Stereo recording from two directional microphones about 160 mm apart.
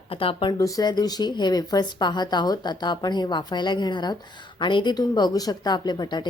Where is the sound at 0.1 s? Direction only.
35° left (ahead or behind).